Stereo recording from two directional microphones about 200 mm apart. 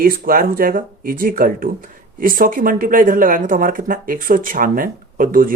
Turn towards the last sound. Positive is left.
turn(degrees=-45)  # may be behind; listen again after turning